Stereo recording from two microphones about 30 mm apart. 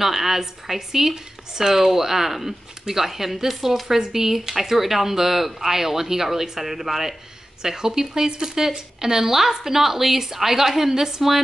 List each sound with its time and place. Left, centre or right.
0.0 s speech: centre
7.6 s speech: centre